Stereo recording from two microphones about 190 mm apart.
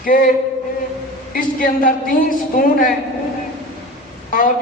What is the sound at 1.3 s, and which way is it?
A woman's voice, 45° left (ahead or behind).